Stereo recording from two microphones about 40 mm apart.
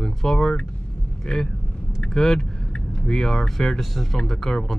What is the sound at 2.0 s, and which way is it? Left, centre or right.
Speech, centre.